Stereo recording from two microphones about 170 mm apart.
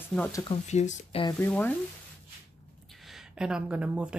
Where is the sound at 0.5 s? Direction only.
40° left (ahead or behind).